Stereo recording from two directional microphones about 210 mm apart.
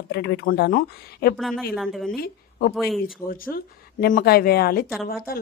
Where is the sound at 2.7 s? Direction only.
Centre (ahead or behind).